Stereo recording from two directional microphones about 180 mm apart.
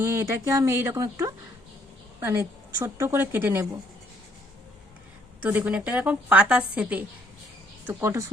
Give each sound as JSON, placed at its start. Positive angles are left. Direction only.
{"t": 0.0, "sound": "a woman's voice", "side_deg": -15}
{"t": 5.4, "sound": "a woman's voice", "side_deg": -10}